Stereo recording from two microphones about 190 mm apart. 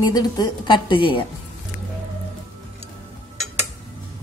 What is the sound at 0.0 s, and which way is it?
A woman's voice, 20° left (ahead or behind).